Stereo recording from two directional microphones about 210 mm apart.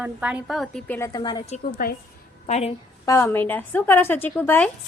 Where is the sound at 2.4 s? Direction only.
30° left (ahead or behind).